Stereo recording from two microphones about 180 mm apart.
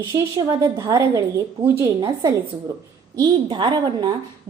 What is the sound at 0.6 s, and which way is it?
A woman's voice, 20° right (ahead or behind).